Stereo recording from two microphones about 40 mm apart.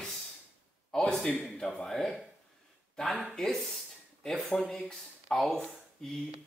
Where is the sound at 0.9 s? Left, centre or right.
Left.